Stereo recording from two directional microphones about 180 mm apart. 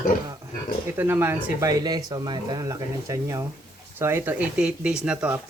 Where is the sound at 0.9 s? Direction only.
10° right (ahead or behind).